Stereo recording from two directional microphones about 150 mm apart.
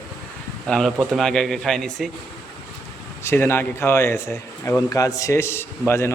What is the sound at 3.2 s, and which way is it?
A man's voice, 15° left (ahead or behind).